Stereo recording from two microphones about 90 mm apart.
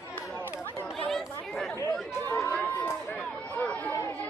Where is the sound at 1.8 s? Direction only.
35° left (ahead or behind).